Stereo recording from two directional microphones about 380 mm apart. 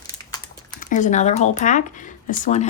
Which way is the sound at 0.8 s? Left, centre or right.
Centre.